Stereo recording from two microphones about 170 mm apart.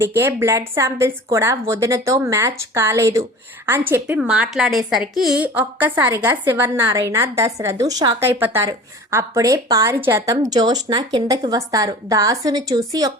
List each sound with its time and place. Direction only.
0.0 s a woman's voice: 15° right (ahead or behind)